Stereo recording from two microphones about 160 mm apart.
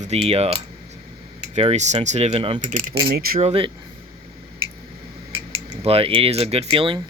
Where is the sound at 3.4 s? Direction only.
35° right (ahead or behind).